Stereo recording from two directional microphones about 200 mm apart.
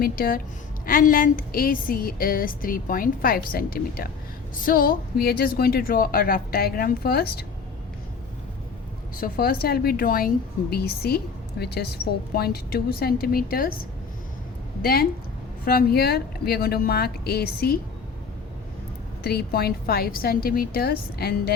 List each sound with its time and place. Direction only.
0.0 s speech: 45° left (ahead or behind)
9.1 s speech: 45° left (ahead or behind)
14.8 s a woman's voice: 50° left (ahead or behind)
19.2 s speech: 50° left (ahead or behind)